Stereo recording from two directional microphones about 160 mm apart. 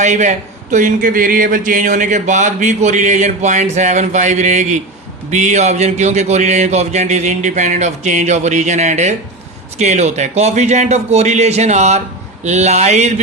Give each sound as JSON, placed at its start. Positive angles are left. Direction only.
{"t": 0.0, "sound": "a man's voice", "side_deg": -50}